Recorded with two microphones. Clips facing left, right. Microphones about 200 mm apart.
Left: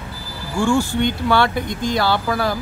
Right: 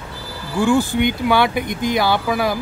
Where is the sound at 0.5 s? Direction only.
20° right (ahead or behind).